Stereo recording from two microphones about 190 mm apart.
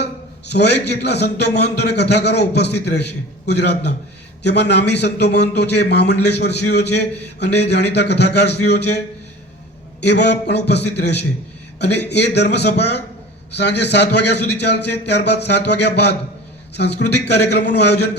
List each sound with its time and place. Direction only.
0.5 s a man's voice: 65° left (ahead or behind)
10.0 s a man's voice: 65° left (ahead or behind)